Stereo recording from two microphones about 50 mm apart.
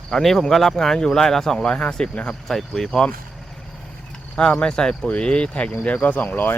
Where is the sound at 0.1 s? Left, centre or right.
Centre.